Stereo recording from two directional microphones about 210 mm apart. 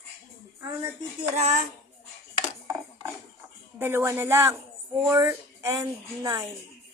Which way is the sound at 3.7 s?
10° right (ahead or behind).